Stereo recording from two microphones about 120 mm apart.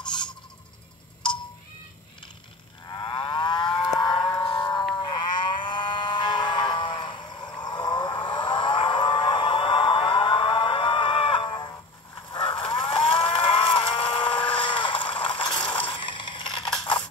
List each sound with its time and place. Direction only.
0.0 s owl: 40° left (ahead or behind)
2.9 s livestock: 40° left (ahead or behind)
4.9 s music: 40° left (ahead or behind)
12.3 s moo: 40° left (ahead or behind)
15.6 s mechanisms: 40° left (ahead or behind)